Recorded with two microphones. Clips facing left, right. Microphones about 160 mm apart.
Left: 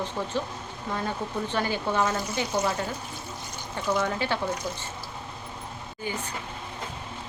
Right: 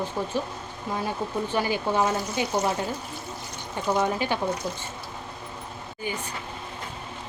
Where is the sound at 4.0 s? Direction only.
15° right (ahead or behind).